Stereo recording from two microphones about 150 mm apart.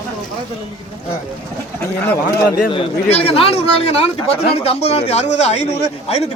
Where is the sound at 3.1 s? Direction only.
40° left (ahead or behind).